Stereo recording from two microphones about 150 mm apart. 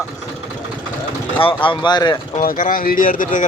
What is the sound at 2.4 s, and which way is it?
Speech, 65° left (ahead or behind).